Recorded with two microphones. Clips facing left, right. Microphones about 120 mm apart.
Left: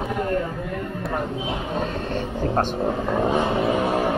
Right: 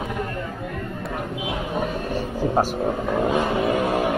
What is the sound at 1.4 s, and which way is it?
Vehicle, 10° right (ahead or behind).